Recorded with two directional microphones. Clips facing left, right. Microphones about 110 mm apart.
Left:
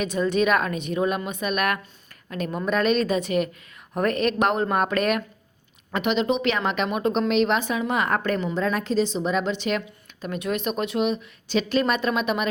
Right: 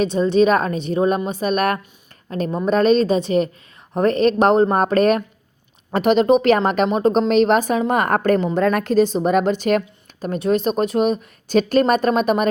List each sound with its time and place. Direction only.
0.0 s a woman's voice: 30° right (ahead or behind)